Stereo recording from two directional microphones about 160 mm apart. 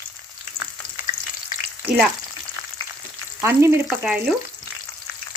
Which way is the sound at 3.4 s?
15° right (ahead or behind).